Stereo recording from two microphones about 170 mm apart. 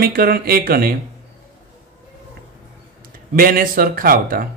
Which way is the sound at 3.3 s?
55° right (ahead or behind).